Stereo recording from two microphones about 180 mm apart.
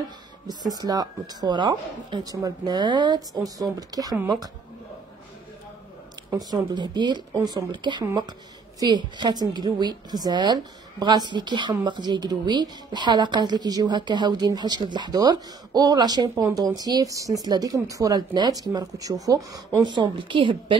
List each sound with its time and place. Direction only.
0.5 s speech: 20° right (ahead or behind)
6.3 s speech: 25° right (ahead or behind)